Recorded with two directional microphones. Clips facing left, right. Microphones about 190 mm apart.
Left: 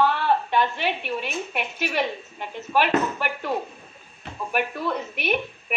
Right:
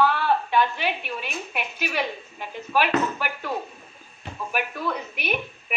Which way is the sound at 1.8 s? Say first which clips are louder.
Left 2 dB; centre (ahead or behind).